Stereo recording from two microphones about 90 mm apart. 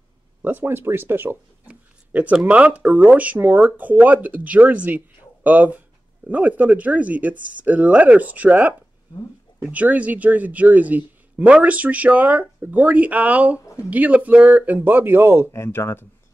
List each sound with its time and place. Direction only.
0.4 s a man's voice: 20° right (ahead or behind)
15.5 s speech: 30° left (ahead or behind)